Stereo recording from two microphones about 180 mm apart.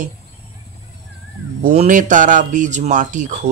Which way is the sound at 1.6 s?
40° right (ahead or behind).